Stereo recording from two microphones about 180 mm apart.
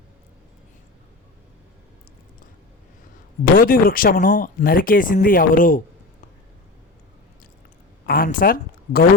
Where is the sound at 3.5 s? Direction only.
50° left (ahead or behind).